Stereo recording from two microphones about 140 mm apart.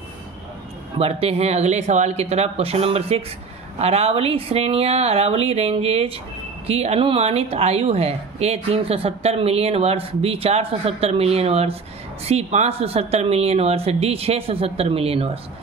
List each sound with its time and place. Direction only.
0.9 s speech: 45° right (ahead or behind)